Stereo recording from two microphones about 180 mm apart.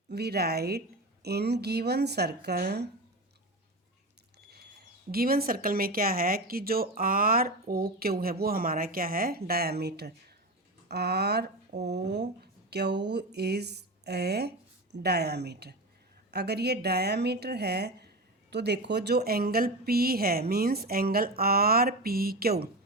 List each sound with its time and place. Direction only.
0.1 s speech: 65° right (ahead or behind)
4.4 s a sound: 60° right (ahead or behind)
5.1 s speech: 55° right (ahead or behind)